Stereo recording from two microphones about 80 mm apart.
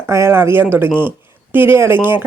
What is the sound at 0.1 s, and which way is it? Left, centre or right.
Speech, right.